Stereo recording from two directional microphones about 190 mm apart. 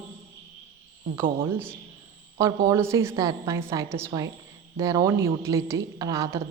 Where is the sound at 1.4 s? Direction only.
10° right (ahead or behind).